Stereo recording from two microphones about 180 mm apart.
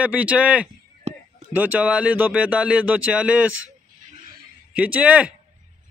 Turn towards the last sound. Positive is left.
turn(degrees=-5)  # may be behind; listen again after turning